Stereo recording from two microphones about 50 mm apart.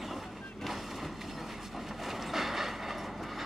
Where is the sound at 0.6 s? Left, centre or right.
Centre.